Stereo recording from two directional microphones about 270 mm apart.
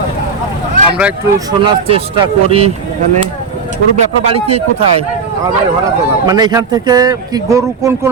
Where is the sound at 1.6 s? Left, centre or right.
Centre.